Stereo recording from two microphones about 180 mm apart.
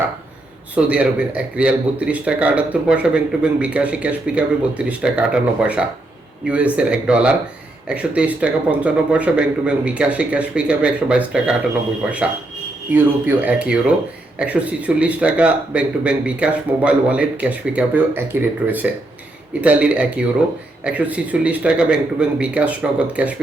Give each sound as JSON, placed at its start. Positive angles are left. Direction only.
{"t": 0.8, "sound": "speech", "side_deg": -5}
{"t": 12.9, "sound": "speech", "side_deg": -10}